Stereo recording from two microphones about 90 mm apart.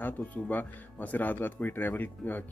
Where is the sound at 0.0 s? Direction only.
20° left (ahead or behind).